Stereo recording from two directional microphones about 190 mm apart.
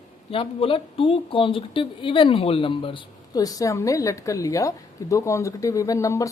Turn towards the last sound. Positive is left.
turn(degrees=15)  # may be behind; listen again after turning